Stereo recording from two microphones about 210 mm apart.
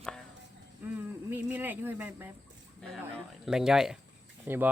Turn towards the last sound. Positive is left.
turn(degrees=-10)  # may be behind; listen again after turning